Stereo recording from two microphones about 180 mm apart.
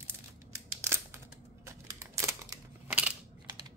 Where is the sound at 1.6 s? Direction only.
15° right (ahead or behind).